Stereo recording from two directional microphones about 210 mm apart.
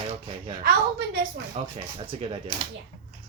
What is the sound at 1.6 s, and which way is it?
Speech, 25° right (ahead or behind).